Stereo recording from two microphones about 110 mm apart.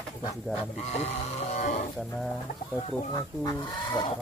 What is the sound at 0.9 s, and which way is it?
Vehicle, 90° left.